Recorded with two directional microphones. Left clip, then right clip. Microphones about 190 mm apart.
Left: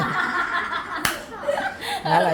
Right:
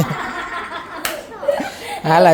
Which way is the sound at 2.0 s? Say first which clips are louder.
Right 8 dB; 45° right (ahead or behind).